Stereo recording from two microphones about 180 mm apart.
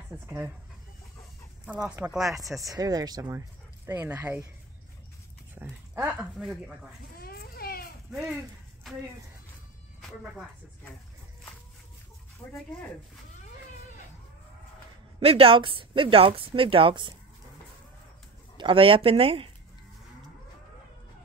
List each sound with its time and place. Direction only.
1.7 s speech: 5° right (ahead or behind)
2.7 s speech: 20° right (ahead or behind)
5.5 s dog: 10° right (ahead or behind)
6.3 s speech: 5° right (ahead or behind)
7.2 s a sound: 60° left (ahead or behind)
12.4 s speech: 20° left (ahead or behind)
15.1 s speech: 30° right (ahead or behind)
18.6 s speech: 30° right (ahead or behind)